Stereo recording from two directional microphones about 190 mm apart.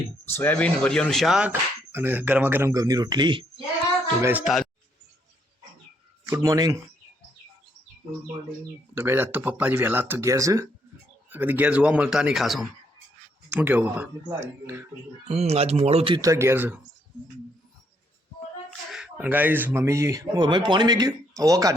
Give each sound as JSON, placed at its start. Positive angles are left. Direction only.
{"t": 0.3, "sound": "speech", "side_deg": 10}
{"t": 4.2, "sound": "speech", "side_deg": -10}
{"t": 6.2, "sound": "speech", "side_deg": -15}
{"t": 9.0, "sound": "speech", "side_deg": -10}
{"t": 15.3, "sound": "speech", "side_deg": -35}
{"t": 18.9, "sound": "speech", "side_deg": -5}